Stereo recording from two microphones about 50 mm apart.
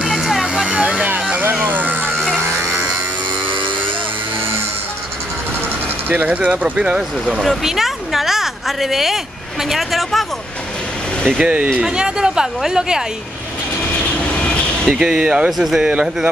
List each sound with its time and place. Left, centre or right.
0.1 s vehicle: centre
0.7 s vehicle: right
1.6 s a sound: right
2.4 s electric shaver: right
6.0 s speech: right
6.8 s speech: right
7.3 s a woman's voice: centre
11.3 s speech: right
14.9 s speech: centre
15.2 s speech: right
15.5 s speech: centre
15.8 s speech: right